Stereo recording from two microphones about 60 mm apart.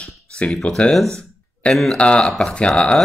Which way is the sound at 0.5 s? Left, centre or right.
Centre.